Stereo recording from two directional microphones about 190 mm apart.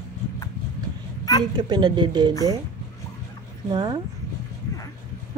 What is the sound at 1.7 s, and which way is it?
Speech, 25° right (ahead or behind).